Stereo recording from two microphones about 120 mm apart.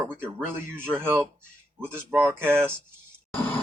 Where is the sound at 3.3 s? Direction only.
15° left (ahead or behind).